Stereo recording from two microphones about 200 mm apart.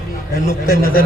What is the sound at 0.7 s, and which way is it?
Speech, 45° left (ahead or behind).